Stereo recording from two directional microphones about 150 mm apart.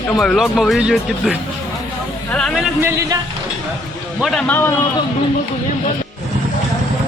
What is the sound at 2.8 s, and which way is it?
Speech, 20° right (ahead or behind).